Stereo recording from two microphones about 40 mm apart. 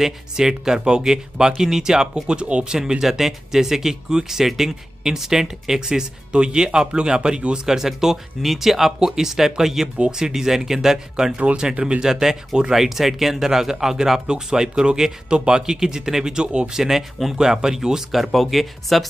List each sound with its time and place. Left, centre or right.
0.0 s speech: centre
7.7 s speech: centre